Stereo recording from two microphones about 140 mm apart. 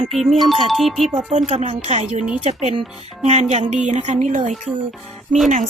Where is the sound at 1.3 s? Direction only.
50° right (ahead or behind).